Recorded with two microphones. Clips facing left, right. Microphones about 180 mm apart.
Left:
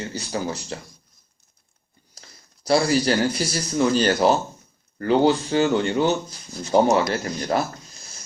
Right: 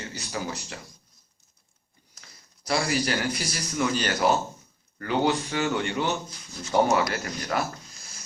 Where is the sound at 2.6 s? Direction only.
30° left (ahead or behind).